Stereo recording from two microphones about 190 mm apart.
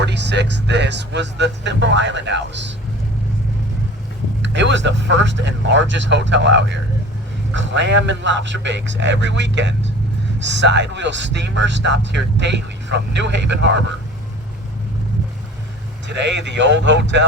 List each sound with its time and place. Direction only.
0.0 s speech: 65° right (ahead or behind)
4.4 s speech: 70° right (ahead or behind)
16.0 s speech: 70° right (ahead or behind)